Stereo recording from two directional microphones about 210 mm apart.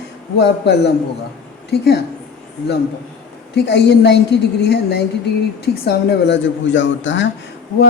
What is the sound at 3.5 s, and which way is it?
A woman's voice, 55° left (ahead or behind).